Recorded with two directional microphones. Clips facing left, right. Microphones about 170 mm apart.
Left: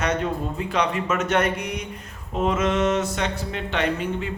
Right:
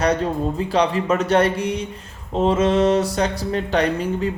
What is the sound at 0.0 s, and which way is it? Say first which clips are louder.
Speech: right 5 dB; 35° right (ahead or behind).